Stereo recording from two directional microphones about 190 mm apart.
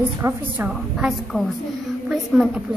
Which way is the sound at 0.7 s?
Centre (ahead or behind).